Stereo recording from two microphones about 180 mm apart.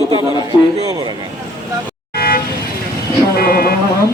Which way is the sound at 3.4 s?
55° left (ahead or behind).